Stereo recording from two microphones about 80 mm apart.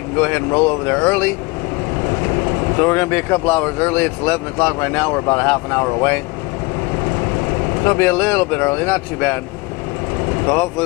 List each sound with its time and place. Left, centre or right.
0.2 s speech: centre
7.8 s speech: left
10.4 s speech: left